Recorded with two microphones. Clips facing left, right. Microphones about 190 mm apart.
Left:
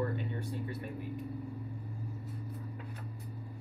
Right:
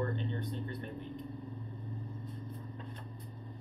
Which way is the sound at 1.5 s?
75° left (ahead or behind).